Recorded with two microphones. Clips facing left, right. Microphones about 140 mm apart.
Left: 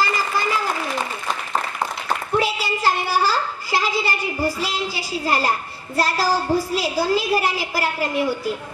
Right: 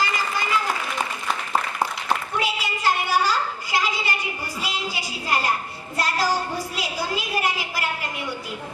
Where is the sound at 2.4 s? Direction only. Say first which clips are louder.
Left 4 dB; 35° left (ahead or behind).